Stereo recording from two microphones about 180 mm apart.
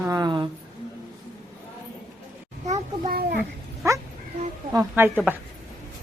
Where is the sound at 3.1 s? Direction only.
55° right (ahead or behind).